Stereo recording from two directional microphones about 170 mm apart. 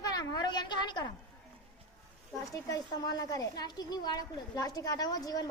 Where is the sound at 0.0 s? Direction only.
20° left (ahead or behind).